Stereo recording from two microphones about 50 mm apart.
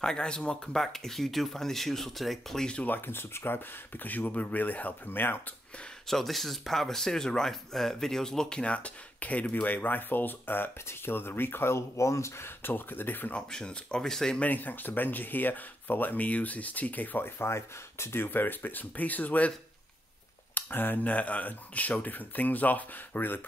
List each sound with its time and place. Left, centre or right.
0.0 s speech: centre
0.7 s speech: centre
3.1 s speech: left
6.0 s speech: centre; by 12.4 s left
12.4 s speech: left
13.5 s speech: centre
14.4 s speech: left
17.4 s speech: left
20.5 s a sound: left
21.0 s speech: left